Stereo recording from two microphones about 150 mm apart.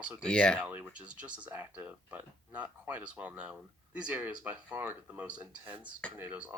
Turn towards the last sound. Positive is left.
turn(degrees=-10)  # may be behind; listen again after turning